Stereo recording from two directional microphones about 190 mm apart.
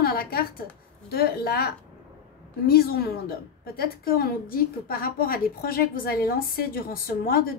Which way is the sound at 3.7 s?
50° left (ahead or behind).